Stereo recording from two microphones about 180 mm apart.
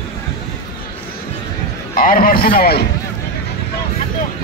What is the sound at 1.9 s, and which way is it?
Speech, 50° left (ahead or behind).